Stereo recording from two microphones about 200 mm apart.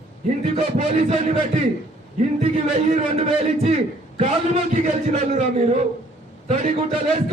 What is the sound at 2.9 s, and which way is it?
A man's voice, 35° right (ahead or behind).